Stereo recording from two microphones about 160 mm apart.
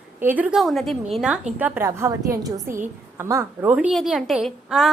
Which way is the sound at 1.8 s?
20° right (ahead or behind).